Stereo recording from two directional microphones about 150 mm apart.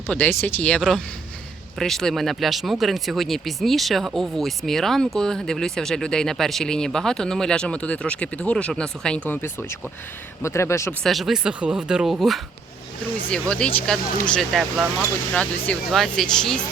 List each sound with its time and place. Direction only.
0.1 s speech: 15° left (ahead or behind)
11.0 s speech: centre (ahead or behind)